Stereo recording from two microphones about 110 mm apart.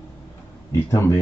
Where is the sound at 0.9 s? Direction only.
25° left (ahead or behind).